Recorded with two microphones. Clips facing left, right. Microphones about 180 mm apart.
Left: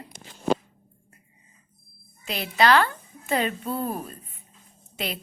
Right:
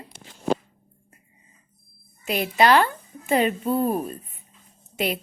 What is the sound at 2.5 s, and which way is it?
Speech, 15° right (ahead or behind).